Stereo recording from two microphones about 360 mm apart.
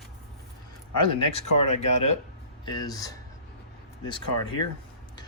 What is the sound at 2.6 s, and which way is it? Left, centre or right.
Speech, centre.